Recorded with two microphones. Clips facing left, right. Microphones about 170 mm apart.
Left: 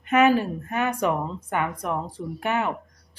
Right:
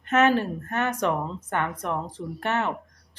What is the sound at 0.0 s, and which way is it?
A woman's voice, 10° left (ahead or behind).